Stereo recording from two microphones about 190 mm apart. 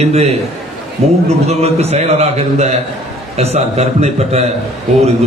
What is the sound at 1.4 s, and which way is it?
A man's voice, 35° right (ahead or behind).